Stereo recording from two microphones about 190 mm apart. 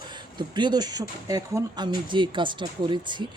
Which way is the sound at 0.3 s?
25° right (ahead or behind).